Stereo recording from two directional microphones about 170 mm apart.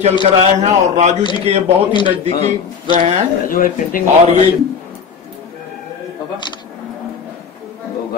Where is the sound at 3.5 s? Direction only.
55° left (ahead or behind).